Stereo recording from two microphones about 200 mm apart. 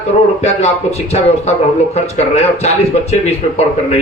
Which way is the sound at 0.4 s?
30° left (ahead or behind).